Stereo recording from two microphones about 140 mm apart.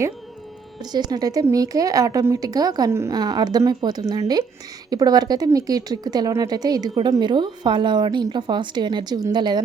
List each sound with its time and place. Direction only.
0.9 s a woman's voice: 30° right (ahead or behind)